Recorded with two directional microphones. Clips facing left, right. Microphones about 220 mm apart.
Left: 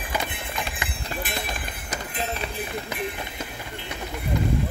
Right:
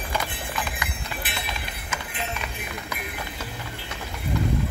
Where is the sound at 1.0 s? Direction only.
45° left (ahead or behind); by 3.3 s 30° left (ahead or behind).